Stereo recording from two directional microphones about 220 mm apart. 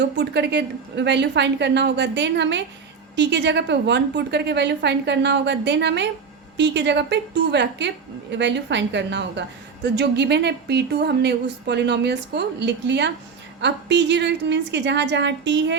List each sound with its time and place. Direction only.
0.2 s a woman's voice: 50° right (ahead or behind)